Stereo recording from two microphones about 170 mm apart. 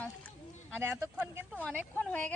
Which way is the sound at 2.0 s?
10° left (ahead or behind).